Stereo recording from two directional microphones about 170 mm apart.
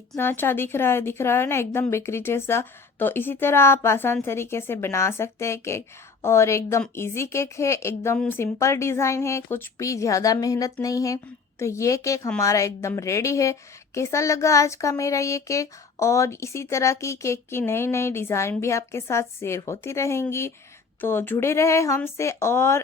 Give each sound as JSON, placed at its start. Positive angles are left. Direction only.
{"t": 0.2, "sound": "a woman's voice", "side_deg": 10}